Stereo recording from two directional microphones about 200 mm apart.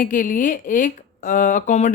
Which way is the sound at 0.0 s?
40° left (ahead or behind).